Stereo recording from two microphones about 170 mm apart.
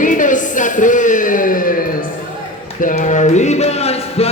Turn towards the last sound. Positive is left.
turn(degrees=35)  # may be behind; listen again after turning